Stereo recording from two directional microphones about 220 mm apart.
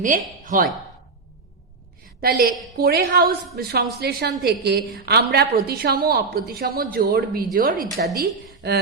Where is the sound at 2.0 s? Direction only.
40° right (ahead or behind).